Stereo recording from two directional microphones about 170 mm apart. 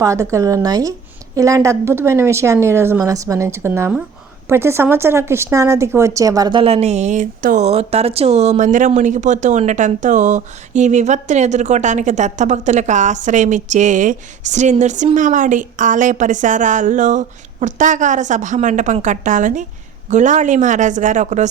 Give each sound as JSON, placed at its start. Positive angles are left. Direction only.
{"t": 0.0, "sound": "a woman's voice", "side_deg": -15}